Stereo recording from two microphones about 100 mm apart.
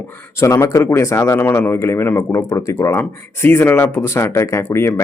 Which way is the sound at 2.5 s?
30° left (ahead or behind).